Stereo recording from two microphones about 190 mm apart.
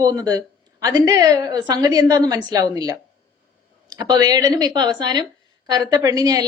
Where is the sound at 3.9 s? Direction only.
20° right (ahead or behind).